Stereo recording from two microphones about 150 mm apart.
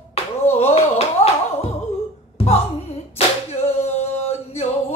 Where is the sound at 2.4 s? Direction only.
40° left (ahead or behind).